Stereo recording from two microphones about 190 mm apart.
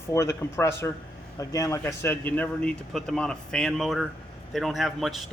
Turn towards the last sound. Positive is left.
turn(degrees=0)  # may be behind; listen again after turning